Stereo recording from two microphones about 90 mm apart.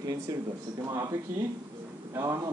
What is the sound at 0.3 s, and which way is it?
Speech, 40° right (ahead or behind).